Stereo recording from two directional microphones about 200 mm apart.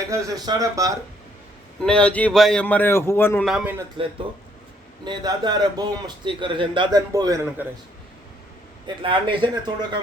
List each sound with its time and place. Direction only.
0.1 s speech: 15° right (ahead or behind)
1.8 s speech: 5° left (ahead or behind)
3.4 s speech: 5° right (ahead or behind)
5.0 s a man's voice: 20° right (ahead or behind)
9.0 s a man's voice: 25° right (ahead or behind)